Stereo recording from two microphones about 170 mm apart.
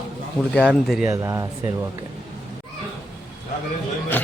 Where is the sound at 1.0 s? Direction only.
20° right (ahead or behind).